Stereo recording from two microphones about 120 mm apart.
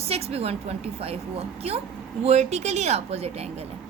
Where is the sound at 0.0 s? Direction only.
60° right (ahead or behind).